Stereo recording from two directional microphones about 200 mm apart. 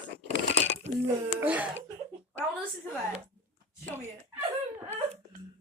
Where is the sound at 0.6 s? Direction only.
35° right (ahead or behind).